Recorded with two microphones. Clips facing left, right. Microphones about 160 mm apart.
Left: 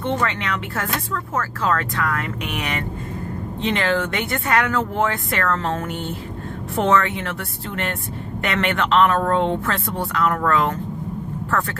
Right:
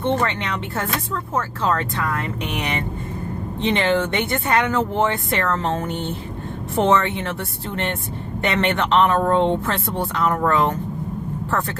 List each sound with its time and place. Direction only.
0.0 s speech: 25° right (ahead or behind)